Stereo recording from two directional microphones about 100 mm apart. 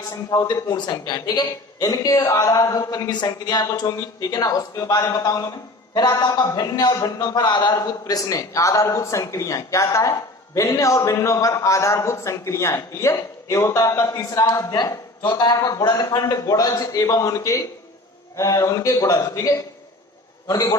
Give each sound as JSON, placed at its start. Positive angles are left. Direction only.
{"t": 0.3, "sound": "a man's voice", "side_deg": 45}